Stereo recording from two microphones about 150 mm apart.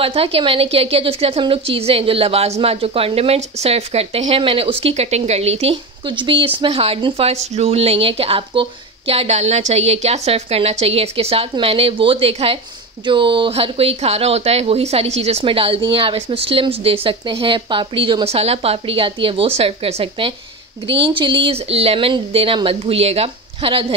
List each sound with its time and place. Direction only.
0.0 s speech: 40° right (ahead or behind)
6.0 s speech: 35° right (ahead or behind)